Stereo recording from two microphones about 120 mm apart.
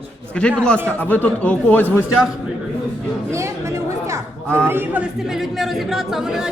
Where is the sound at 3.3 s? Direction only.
25° right (ahead or behind).